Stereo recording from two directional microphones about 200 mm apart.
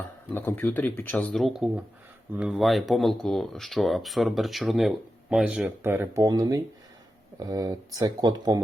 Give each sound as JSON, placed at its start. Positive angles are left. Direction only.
{"t": 0.3, "sound": "speech", "side_deg": 10}